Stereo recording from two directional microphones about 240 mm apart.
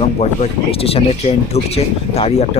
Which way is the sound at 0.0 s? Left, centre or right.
Left.